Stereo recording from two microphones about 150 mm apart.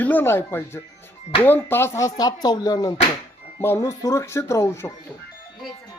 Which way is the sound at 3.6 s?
15° left (ahead or behind).